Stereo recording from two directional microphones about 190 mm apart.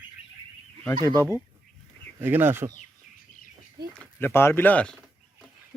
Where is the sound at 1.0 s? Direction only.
15° left (ahead or behind).